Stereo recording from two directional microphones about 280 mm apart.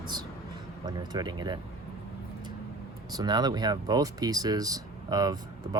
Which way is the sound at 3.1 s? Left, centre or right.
Centre.